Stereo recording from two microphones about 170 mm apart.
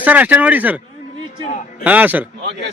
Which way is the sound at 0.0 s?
10° right (ahead or behind).